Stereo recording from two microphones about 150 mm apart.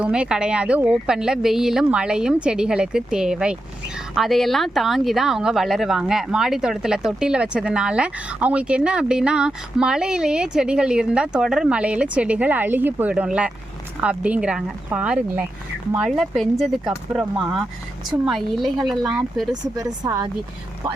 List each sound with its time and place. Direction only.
0.0 s speech: 5° right (ahead or behind)
19.7 s speech: 20° right (ahead or behind)